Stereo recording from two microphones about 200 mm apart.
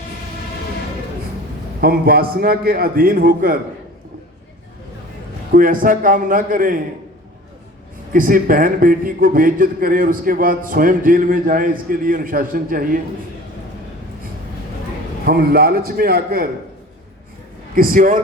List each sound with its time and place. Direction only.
1.8 s a man's voice: 50° right (ahead or behind)
5.5 s a man's voice: 45° right (ahead or behind)
8.1 s a man's voice: 45° right (ahead or behind)
15.3 s a man's voice: 50° right (ahead or behind)
17.7 s speech: 45° right (ahead or behind)